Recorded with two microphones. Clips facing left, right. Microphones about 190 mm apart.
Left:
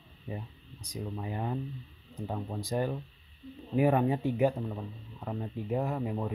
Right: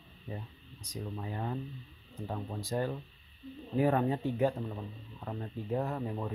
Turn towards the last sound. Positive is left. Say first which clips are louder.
# left 2 dB
turn(degrees=10)  # may be behind; listen again after turning